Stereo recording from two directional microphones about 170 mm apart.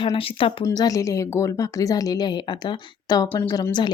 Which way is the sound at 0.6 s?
20° left (ahead or behind).